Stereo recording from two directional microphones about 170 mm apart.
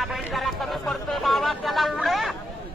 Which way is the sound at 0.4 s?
Centre (ahead or behind).